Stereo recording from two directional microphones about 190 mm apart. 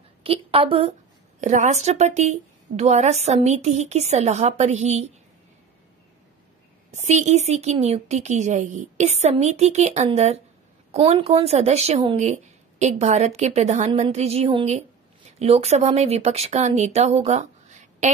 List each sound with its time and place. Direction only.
0.2 s a woman's voice: 30° right (ahead or behind)
6.9 s a woman's voice: 40° right (ahead or behind)